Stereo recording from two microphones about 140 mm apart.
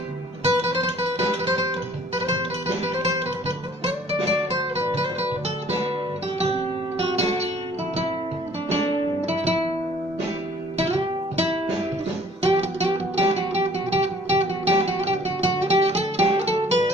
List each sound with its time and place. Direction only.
0.6 s music: 45° right (ahead or behind)
3.8 s music: 50° right (ahead or behind)
7.0 s music: 45° right (ahead or behind)
9.2 s music: 50° right (ahead or behind)
10.8 s music: 50° right (ahead or behind)